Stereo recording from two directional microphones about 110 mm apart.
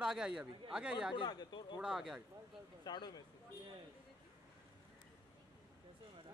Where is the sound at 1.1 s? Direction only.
40° left (ahead or behind).